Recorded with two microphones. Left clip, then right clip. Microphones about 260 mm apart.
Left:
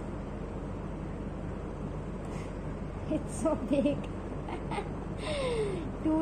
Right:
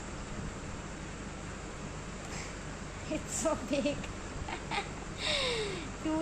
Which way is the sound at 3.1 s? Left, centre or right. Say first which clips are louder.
Left 2 dB; right.